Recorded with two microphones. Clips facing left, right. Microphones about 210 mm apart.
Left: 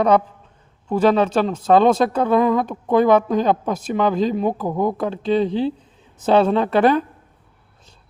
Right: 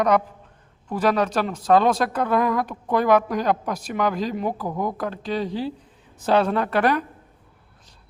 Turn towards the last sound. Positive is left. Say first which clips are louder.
# left 5 dB
turn(degrees=25)  # may be behind; listen again after turning